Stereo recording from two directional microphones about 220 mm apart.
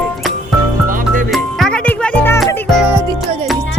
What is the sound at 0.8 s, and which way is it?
Music, 35° right (ahead or behind).